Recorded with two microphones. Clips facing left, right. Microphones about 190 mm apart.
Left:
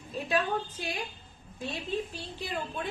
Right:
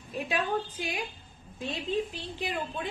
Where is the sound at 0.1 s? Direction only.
15° right (ahead or behind).